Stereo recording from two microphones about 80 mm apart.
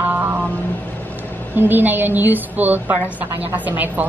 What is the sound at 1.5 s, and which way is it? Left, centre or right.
A woman's voice, right.